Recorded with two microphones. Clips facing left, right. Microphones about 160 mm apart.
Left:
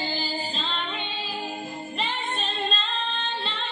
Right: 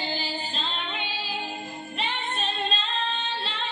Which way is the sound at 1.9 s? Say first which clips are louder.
Even; centre (ahead or behind).